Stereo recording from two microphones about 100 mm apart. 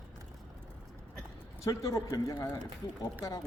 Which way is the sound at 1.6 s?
35° left (ahead or behind).